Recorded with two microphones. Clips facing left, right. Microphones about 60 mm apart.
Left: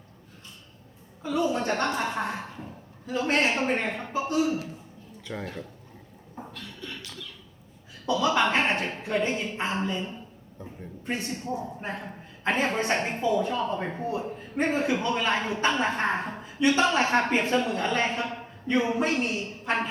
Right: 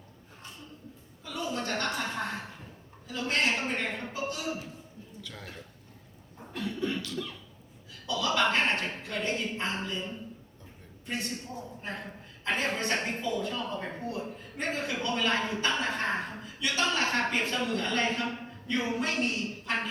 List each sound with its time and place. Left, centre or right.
1.2 s chuckle: left
1.7 s a woman's voice: left
3.5 s a woman's voice: left
6.5 s beatboxing: right
8.1 s a woman's voice: left
11.0 s a man's voice: left
12.5 s a woman's voice: left